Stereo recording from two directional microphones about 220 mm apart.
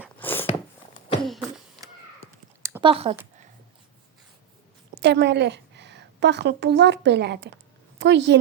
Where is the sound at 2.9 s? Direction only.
25° right (ahead or behind).